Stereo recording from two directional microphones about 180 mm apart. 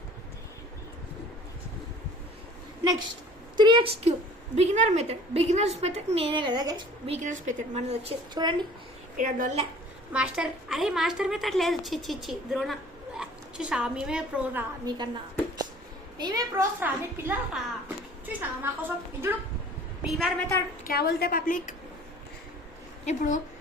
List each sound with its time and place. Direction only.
3.6 s a woman's voice: 25° right (ahead or behind)
4.5 s a woman's voice: 40° right (ahead or behind); by 6.8 s 20° right (ahead or behind)
7.1 s a woman's voice: 45° right (ahead or behind)
8.4 s a woman's voice: 25° right (ahead or behind)
9.1 s a woman's voice: 50° right (ahead or behind)
10.1 s a woman's voice: 5° right (ahead or behind)
14.8 s a woman's voice: 25° right (ahead or behind)
16.1 s a woman's voice: 20° right (ahead or behind)
16.8 s a child's voice: 10° right (ahead or behind)
20.1 s a woman's voice: centre (ahead or behind)
20.8 s a woman's voice: 60° left (ahead or behind)
23.0 s a woman's voice: 45° left (ahead or behind)